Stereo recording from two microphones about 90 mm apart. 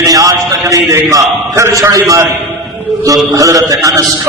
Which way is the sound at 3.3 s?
40° right (ahead or behind).